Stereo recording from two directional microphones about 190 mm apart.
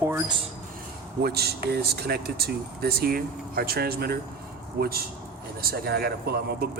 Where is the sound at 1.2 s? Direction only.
55° right (ahead or behind).